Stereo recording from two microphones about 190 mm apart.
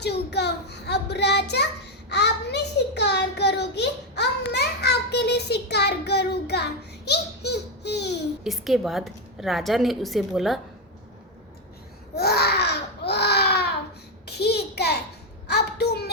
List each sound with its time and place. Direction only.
0.0 s child singing: 60° left (ahead or behind)
8.4 s a woman's voice: centre (ahead or behind)
12.1 s babbling: 55° left (ahead or behind)
14.3 s a sound: 60° left (ahead or behind)